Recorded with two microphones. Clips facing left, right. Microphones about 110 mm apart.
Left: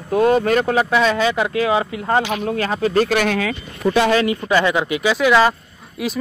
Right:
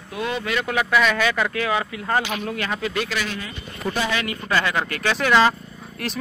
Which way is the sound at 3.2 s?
65° left (ahead or behind).